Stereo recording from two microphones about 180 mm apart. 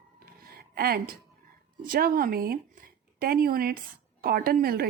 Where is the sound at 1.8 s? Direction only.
55° right (ahead or behind).